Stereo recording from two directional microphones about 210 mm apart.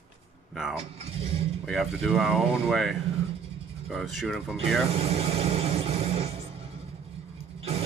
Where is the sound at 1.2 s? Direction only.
30° right (ahead or behind).